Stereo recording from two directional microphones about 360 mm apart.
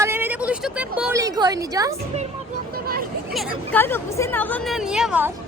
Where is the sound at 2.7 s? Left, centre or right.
Right.